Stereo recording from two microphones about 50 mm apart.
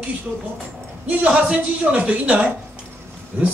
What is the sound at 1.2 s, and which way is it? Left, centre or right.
A man's voice, right.